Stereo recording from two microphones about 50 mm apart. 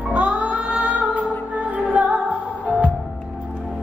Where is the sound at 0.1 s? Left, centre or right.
Right.